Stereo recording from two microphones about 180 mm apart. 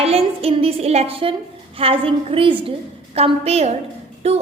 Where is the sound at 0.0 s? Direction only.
35° right (ahead or behind).